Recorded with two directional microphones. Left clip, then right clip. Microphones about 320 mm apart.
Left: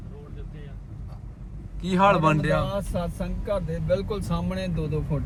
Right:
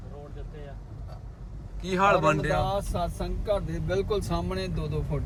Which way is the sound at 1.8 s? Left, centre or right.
Centre.